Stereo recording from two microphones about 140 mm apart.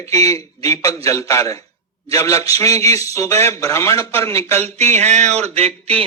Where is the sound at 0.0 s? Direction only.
25° left (ahead or behind).